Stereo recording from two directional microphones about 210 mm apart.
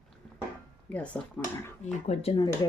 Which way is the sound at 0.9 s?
5° left (ahead or behind).